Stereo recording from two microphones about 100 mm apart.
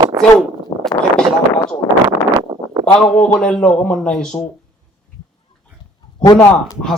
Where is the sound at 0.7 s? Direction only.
55° left (ahead or behind).